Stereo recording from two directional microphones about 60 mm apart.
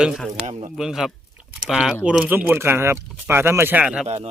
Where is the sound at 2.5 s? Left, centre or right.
Right.